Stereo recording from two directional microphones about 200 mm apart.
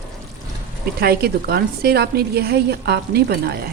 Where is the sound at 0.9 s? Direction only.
50° right (ahead or behind).